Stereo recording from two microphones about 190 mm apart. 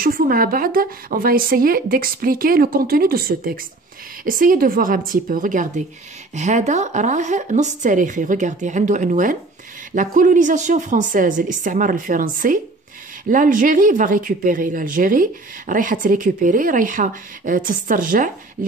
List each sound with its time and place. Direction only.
0.0 s a woman's voice: 50° right (ahead or behind)